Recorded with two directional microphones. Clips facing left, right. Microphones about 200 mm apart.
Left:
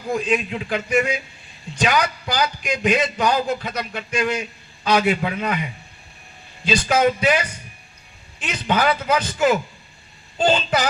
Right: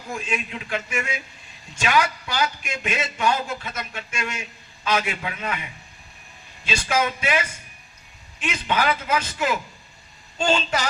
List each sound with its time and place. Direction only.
0.1 s a man's voice: 35° left (ahead or behind)
6.7 s a man's voice: 35° left (ahead or behind)
8.6 s a man's voice: 35° left (ahead or behind)